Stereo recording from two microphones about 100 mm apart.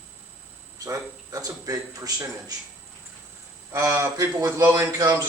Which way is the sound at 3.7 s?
30° right (ahead or behind).